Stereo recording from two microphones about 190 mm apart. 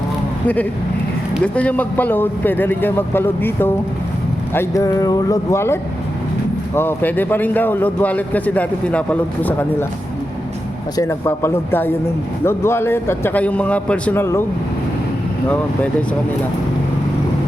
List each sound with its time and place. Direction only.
0.4 s a man's voice: 10° left (ahead or behind)
10.9 s a man's voice: 15° left (ahead or behind)
15.4 s a man's voice: 5° left (ahead or behind)